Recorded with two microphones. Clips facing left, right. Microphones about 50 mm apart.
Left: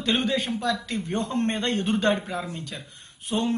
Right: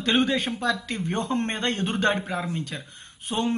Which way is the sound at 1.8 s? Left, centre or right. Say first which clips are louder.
Left 1 dB; centre.